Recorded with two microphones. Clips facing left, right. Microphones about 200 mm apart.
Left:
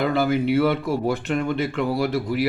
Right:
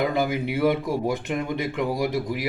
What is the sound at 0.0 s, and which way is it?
Speech, 15° right (ahead or behind).